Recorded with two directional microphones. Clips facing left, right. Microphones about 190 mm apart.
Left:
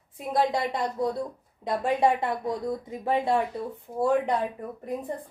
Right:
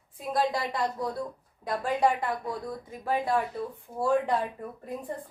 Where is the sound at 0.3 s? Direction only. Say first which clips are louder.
Left 3 dB; 20° left (ahead or behind).